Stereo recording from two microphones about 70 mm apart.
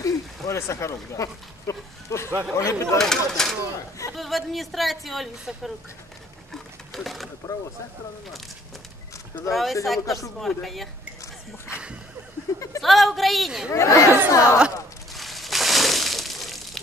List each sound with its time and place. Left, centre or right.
0.0 s speech: left
3.0 s a woman's voice: centre
6.5 s a sound: centre
9.5 s a man's voice: centre
12.8 s a man's voice: centre
13.7 s speech: left
15.1 s a sound: centre